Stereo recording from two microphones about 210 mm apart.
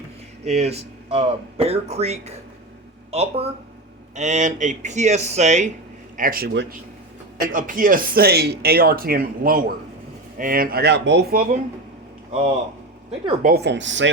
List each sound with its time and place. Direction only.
0.4 s speech: 30° right (ahead or behind); by 6.7 s 55° right (ahead or behind)
7.3 s speech: 40° right (ahead or behind)
13.4 s speech: 50° right (ahead or behind)